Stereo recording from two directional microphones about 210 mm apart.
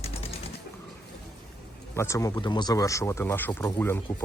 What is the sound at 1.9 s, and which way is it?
Speech, 15° left (ahead or behind).